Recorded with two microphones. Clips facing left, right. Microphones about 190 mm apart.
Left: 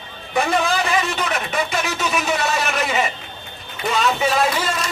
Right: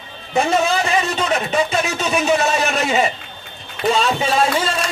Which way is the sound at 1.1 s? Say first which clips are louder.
Right 4 dB; 30° right (ahead or behind).